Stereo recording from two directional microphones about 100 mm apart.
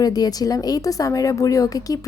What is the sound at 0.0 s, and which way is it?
A woman's voice, 40° left (ahead or behind).